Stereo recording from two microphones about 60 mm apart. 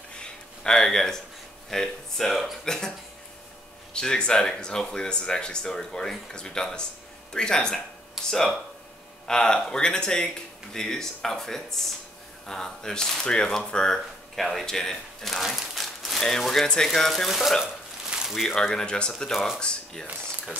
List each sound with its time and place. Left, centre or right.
0.2 s a sound: centre
1.7 s speech: centre
3.9 s speech: centre
18.8 s speech: centre